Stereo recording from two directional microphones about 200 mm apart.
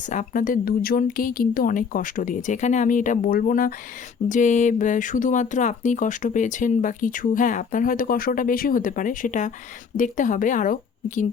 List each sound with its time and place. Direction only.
0.0 s speech: 40° left (ahead or behind)